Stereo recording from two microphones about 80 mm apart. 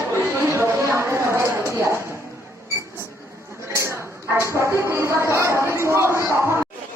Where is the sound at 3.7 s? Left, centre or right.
Right.